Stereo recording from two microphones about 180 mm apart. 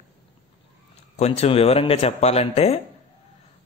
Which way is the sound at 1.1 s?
35° left (ahead or behind).